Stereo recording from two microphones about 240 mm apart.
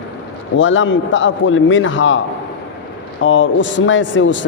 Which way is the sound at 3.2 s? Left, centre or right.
Left.